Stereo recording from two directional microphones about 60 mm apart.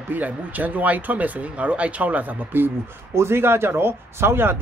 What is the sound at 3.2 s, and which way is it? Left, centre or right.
Speech, right.